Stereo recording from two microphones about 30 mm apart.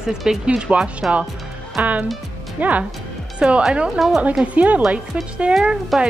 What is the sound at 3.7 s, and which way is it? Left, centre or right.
Speech, right.